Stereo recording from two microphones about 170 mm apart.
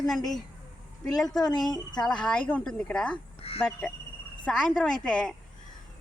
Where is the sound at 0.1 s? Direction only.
Centre (ahead or behind).